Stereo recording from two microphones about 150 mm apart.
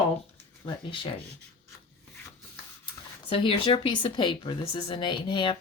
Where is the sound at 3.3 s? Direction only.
35° left (ahead or behind).